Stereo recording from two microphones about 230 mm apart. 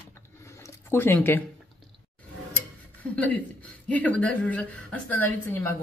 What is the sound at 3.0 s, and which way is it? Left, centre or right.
Speech, centre.